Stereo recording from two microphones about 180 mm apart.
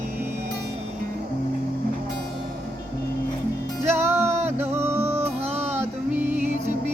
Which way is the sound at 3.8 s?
15° right (ahead or behind).